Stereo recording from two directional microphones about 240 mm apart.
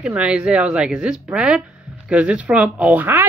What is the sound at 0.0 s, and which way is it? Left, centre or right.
Speech, centre.